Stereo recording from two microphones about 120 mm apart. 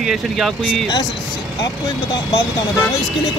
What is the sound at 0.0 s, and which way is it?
Speech, 5° right (ahead or behind).